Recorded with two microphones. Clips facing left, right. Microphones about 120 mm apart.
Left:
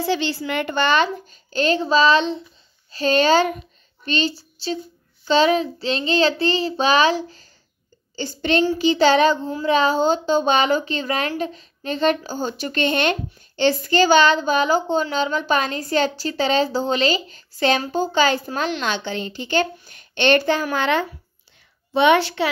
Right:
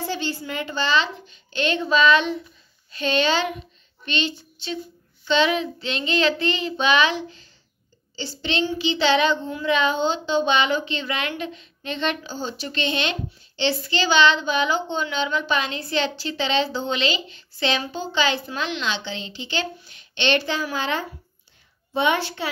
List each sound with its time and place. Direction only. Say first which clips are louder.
0.0 s child singing: left 5 dB; 90° left; by 2.4 s 30° left (ahead or behind)
2.9 s a child's voice: left 5 dB; 40° left (ahead or behind)
5.2 s child singing: left 4 dB; 40° left (ahead or behind)
8.2 s child singing: left 6 dB; 50° left (ahead or behind); by 21.1 s 65° left (ahead or behind)
21.9 s a child's voice: left 6 dB; 75° left (ahead or behind)